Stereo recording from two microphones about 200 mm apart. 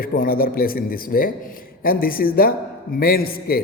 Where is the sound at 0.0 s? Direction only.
45° left (ahead or behind).